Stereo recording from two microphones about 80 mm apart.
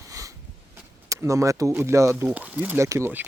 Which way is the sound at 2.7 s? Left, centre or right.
Right.